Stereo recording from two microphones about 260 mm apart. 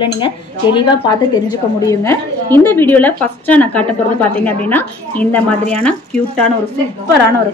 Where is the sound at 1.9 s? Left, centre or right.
Centre.